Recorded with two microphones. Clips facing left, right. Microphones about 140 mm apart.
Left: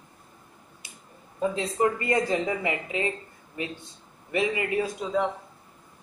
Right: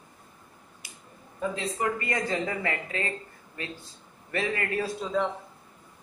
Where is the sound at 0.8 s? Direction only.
25° left (ahead or behind).